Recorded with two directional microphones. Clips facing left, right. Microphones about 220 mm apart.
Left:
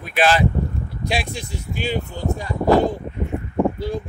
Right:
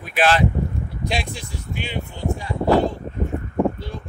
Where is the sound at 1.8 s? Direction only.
40° left (ahead or behind).